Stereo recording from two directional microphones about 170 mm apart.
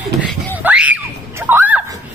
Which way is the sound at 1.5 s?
10° right (ahead or behind).